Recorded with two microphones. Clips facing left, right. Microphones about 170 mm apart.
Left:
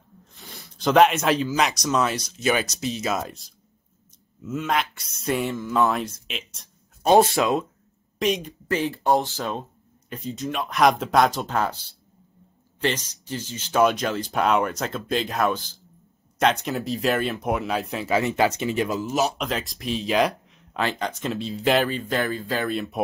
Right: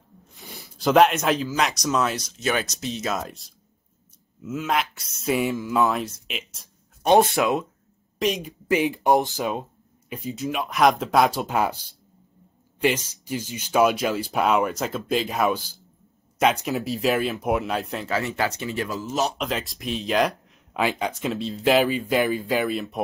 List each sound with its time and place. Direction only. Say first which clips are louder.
0.4 s a sound: right 2 dB; 15° right (ahead or behind)
0.7 s speech: even; centre (ahead or behind)
18.1 s speech: left 5 dB; 20° left (ahead or behind); by 23.0 s centre (ahead or behind)